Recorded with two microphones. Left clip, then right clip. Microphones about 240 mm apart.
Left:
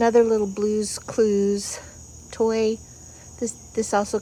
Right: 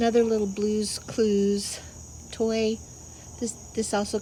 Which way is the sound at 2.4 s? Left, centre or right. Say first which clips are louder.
Left 5 dB; left.